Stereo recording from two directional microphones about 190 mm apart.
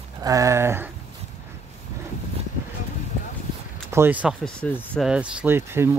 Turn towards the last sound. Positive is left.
turn(degrees=-10)  # may be behind; listen again after turning